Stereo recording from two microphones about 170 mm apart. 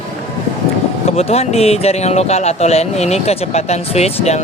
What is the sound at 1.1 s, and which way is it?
Speech, 35° left (ahead or behind).